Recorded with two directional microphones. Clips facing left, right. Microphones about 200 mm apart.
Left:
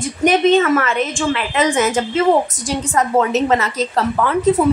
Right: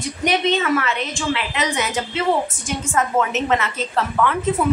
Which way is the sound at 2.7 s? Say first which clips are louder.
Left 4 dB; 35° left (ahead or behind).